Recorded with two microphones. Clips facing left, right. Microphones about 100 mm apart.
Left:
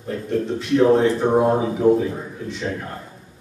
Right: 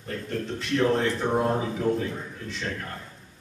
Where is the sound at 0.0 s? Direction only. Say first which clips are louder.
Left 8 dB; 10° left (ahead or behind).